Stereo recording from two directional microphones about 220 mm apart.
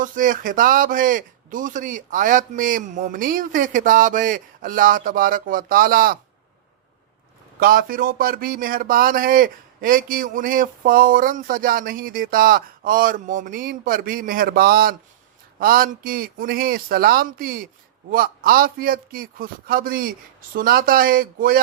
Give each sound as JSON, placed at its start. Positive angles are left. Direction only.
{"t": 0.0, "sound": "a man's voice", "side_deg": -35}
{"t": 7.6, "sound": "a man's voice", "side_deg": -40}